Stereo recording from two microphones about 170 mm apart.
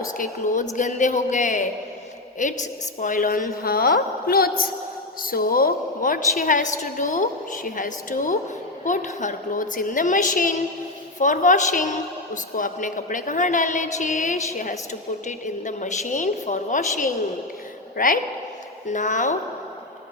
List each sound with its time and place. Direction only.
0.0 s a woman's voice: 50° left (ahead or behind)